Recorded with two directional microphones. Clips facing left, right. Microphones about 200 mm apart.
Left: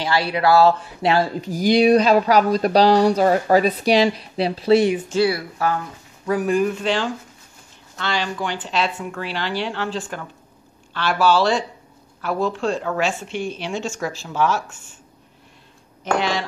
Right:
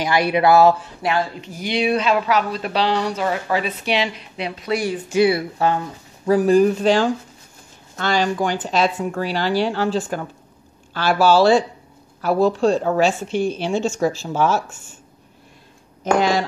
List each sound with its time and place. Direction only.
0.0 s speech: 20° right (ahead or behind)
1.0 s speech: 35° left (ahead or behind)
5.1 s speech: 20° right (ahead or behind)
14.2 s speech: 35° right (ahead or behind)
16.2 s speech: 40° right (ahead or behind)